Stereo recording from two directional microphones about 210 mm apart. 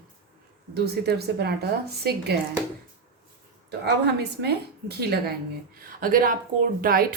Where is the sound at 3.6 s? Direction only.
50° right (ahead or behind).